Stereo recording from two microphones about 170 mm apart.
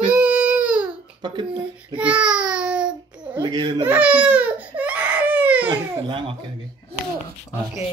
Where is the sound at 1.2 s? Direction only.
25° right (ahead or behind).